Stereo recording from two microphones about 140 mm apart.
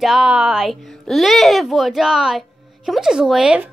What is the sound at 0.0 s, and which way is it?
Speech, 5° right (ahead or behind).